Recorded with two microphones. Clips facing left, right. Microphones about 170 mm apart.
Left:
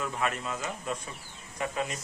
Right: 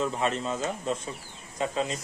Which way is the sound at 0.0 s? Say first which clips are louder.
Right 4 dB; 25° right (ahead or behind).